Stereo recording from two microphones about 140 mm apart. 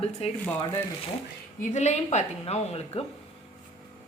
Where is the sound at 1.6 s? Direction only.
55° left (ahead or behind).